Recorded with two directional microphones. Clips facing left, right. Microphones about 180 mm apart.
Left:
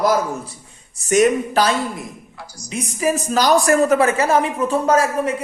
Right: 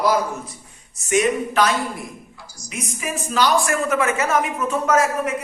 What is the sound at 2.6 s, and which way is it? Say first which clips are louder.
Speech: left 8 dB; 30° left (ahead or behind).